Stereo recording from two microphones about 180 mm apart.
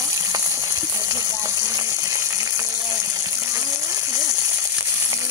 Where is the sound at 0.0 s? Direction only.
15° right (ahead or behind).